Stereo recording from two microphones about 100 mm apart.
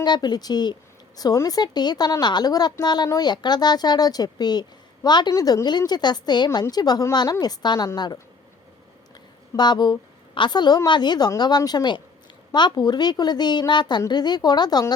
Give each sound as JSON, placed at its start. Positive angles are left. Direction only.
{"t": 0.0, "sound": "a woman's voice", "side_deg": 45}
{"t": 5.3, "sound": "a woman's voice", "side_deg": 35}
{"t": 9.6, "sound": "a woman's voice", "side_deg": 45}